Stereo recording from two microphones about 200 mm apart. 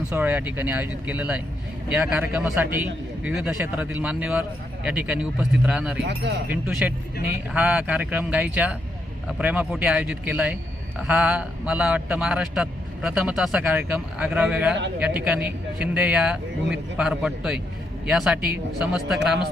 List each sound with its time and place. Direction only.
0.1 s a man's voice: 10° right (ahead or behind)
6.0 s speech: 60° right (ahead or behind)
6.5 s a man's voice: 5° right (ahead or behind)